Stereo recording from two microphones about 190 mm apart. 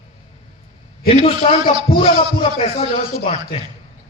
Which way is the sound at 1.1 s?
35° left (ahead or behind).